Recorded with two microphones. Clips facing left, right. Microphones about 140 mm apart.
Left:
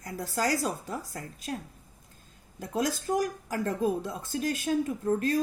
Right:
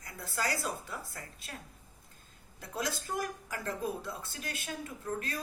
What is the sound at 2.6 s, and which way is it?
A woman's voice, 45° left (ahead or behind).